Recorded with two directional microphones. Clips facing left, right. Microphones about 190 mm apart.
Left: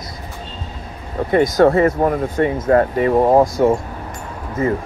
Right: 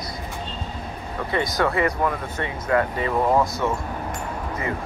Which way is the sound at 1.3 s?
45° left (ahead or behind).